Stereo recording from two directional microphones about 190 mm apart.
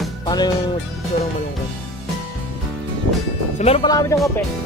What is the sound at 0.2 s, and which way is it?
Music, 20° left (ahead or behind).